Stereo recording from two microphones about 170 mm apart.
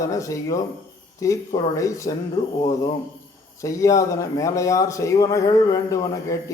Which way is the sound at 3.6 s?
20° left (ahead or behind).